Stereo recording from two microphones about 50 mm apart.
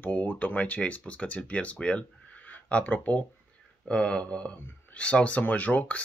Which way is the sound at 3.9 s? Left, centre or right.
Left.